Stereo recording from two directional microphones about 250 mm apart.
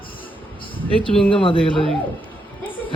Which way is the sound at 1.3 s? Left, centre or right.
Left.